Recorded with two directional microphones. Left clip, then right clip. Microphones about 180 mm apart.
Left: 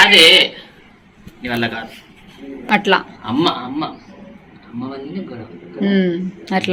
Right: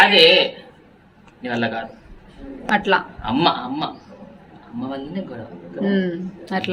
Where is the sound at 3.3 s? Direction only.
20° right (ahead or behind).